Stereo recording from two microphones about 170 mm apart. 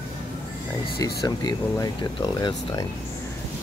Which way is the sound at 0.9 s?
25° left (ahead or behind).